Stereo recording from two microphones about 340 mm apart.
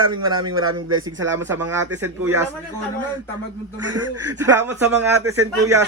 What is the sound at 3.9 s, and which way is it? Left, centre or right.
Speech, right.